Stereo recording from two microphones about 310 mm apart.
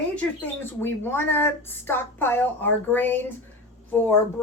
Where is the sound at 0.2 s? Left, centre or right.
Centre.